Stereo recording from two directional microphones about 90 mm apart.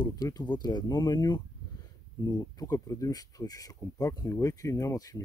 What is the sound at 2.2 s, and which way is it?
Speech, 40° left (ahead or behind).